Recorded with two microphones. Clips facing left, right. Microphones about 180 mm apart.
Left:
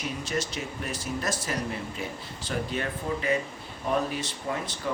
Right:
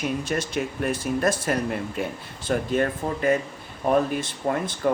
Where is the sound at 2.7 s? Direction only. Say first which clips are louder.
Right 6 dB; 50° right (ahead or behind).